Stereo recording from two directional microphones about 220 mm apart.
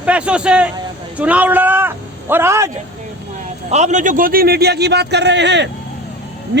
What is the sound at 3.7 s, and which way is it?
A man's voice, 30° right (ahead or behind).